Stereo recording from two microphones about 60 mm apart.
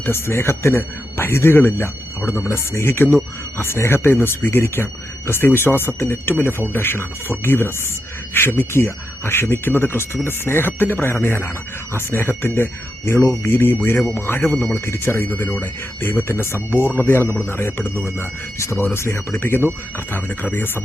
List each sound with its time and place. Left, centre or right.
0.0 s speech: left